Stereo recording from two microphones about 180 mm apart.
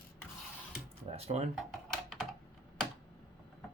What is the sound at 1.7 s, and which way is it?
Computer keyboard, centre (ahead or behind).